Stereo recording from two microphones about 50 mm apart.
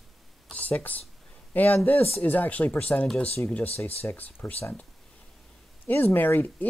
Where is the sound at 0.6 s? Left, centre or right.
Left.